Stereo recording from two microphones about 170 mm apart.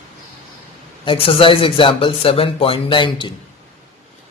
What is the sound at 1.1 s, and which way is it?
Speech, 30° left (ahead or behind).